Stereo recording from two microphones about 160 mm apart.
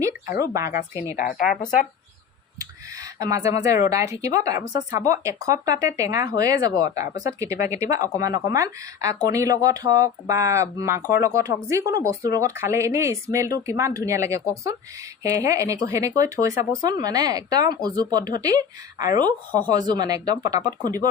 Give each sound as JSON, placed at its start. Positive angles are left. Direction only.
{"t": 0.3, "sound": "speech", "side_deg": -20}
{"t": 1.1, "sound": "speech", "side_deg": 55}
{"t": 3.2, "sound": "speech", "side_deg": -20}